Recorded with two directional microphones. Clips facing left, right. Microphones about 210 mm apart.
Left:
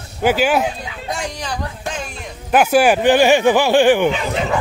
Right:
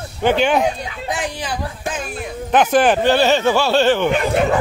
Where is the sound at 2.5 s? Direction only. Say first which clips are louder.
Left 1 dB; 10° left (ahead or behind).